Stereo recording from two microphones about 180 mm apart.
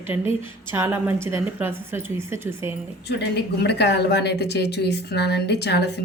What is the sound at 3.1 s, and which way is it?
Speech, 70° left (ahead or behind).